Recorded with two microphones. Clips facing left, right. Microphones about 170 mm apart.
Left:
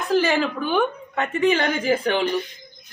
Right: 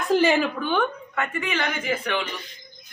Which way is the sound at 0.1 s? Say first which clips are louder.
Right 1 dB; 20° right (ahead or behind).